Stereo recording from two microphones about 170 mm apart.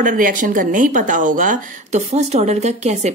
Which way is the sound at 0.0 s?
50° right (ahead or behind).